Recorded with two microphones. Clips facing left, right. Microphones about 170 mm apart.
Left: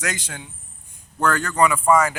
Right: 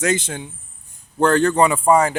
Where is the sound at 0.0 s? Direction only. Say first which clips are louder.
Right 9 dB; 25° right (ahead or behind).